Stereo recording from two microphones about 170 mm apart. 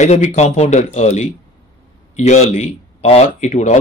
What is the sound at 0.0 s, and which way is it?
Speech, 40° left (ahead or behind).